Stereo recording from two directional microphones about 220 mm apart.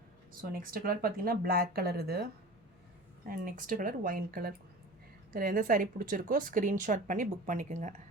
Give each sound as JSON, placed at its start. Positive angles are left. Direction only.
{"t": 0.5, "sound": "speech", "side_deg": -40}
{"t": 3.2, "sound": "speech", "side_deg": -40}